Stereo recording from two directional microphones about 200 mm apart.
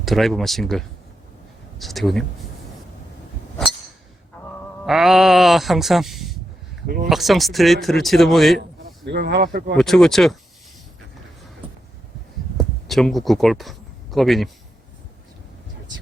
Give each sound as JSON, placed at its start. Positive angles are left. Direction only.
{"t": 0.0, "sound": "speech", "side_deg": 0}
{"t": 4.9, "sound": "speech", "side_deg": 0}
{"t": 6.8, "sound": "speech", "side_deg": -45}
{"t": 7.1, "sound": "speech", "side_deg": 0}
{"t": 9.0, "sound": "speech", "side_deg": -55}
{"t": 9.7, "sound": "speech", "side_deg": 0}
{"t": 12.5, "sound": "speech", "side_deg": 0}